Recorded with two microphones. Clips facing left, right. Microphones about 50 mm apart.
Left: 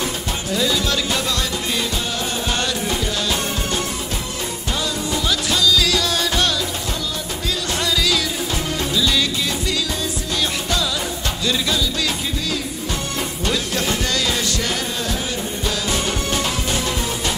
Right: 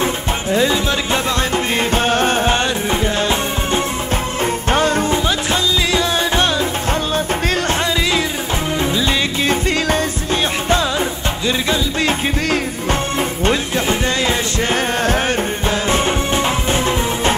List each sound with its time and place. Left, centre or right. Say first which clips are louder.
0.0 s music: right 5 dB; right
2.5 s music: right 5 dB; right
4.6 s music: right 9 dB; right
5.1 s music: right 4 dB; right
8.7 s music: right 2 dB; right
11.4 s music: right 3 dB; right
15.9 s music: right 6 dB; right